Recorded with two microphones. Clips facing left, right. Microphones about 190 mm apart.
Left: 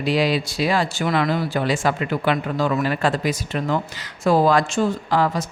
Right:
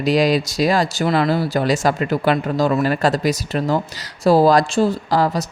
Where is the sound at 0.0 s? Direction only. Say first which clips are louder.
Right 4 dB; 40° right (ahead or behind).